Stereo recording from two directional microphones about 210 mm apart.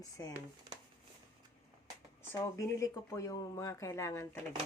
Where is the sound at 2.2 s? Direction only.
15° left (ahead or behind).